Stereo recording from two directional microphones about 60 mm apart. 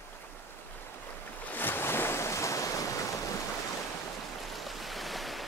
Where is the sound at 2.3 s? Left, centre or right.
Left.